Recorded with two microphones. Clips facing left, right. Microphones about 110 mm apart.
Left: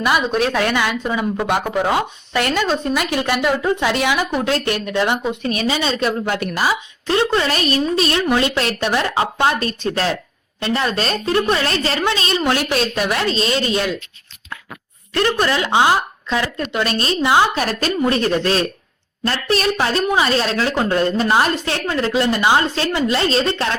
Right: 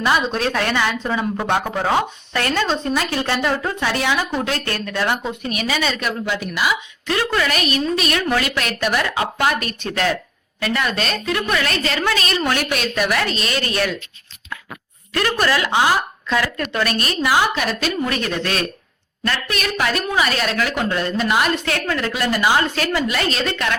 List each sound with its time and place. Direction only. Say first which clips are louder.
0.0 s a woman's voice: left 2 dB; 10° left (ahead or behind)
5.5 s a woman's voice: left 2 dB; 30° left (ahead or behind)
6.5 s speech: left 1 dB; 40° left (ahead or behind)
7.1 s a woman's voice: left 3 dB; 25° left (ahead or behind)
15.1 s a woman's voice: left 1 dB; 25° left (ahead or behind)